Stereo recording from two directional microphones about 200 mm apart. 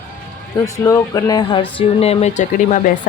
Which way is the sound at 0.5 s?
15° left (ahead or behind).